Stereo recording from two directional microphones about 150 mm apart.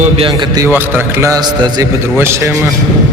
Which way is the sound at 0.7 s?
15° right (ahead or behind).